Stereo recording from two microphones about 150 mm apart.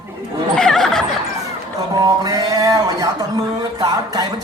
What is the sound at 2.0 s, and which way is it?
Speech, 25° right (ahead or behind).